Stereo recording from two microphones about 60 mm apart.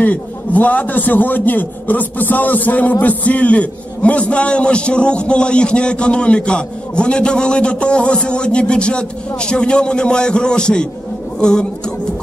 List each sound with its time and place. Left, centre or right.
0.0 s a man's voice: left